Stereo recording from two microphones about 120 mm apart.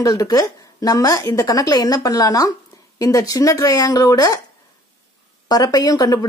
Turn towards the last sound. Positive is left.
turn(degrees=35)  # may be behind; listen again after turning